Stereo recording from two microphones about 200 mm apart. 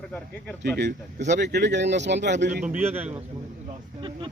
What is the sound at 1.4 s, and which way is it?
Speech, 60° right (ahead or behind).